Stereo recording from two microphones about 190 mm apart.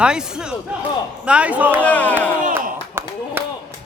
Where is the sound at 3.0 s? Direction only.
15° right (ahead or behind).